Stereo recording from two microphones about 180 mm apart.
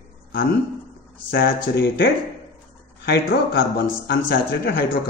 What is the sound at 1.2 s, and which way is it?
A man's voice, 60° left (ahead or behind).